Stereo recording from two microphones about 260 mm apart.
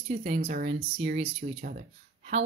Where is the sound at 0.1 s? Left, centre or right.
Right.